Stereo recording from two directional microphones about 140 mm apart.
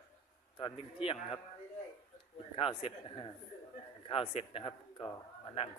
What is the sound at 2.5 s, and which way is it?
Speech, 40° left (ahead or behind).